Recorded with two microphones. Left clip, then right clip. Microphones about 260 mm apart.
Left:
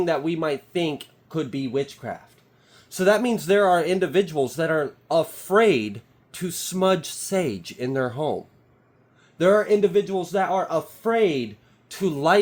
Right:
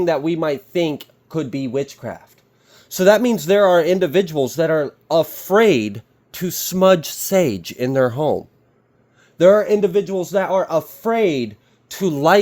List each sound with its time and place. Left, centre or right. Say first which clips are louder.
0.0 s speech: right 5 dB; right
9.4 s speech: right 5 dB; right